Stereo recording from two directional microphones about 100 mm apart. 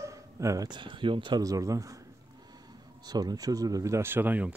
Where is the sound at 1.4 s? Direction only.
35° right (ahead or behind).